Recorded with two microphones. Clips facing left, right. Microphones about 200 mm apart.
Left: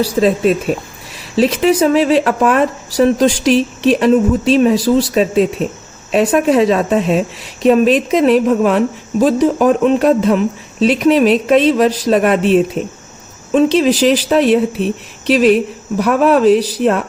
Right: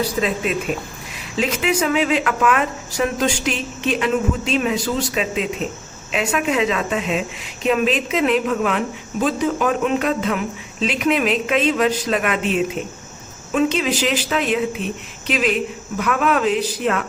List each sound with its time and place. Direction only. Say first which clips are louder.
0.0 s a woman's voice: left 9 dB; 35° left (ahead or behind)